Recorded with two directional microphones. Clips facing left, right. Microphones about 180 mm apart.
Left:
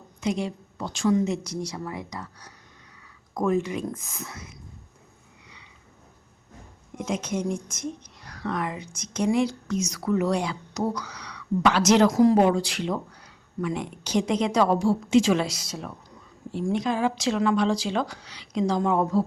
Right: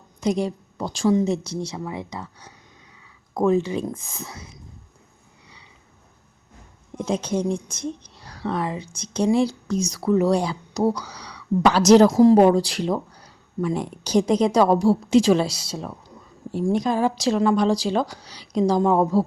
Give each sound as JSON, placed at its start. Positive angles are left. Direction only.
{"t": 0.2, "sound": "speech", "side_deg": -40}
{"t": 6.9, "sound": "speech", "side_deg": -35}
{"t": 16.5, "sound": "speech", "side_deg": -40}